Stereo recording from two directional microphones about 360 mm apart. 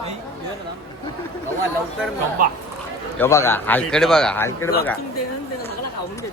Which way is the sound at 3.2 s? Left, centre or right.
Centre.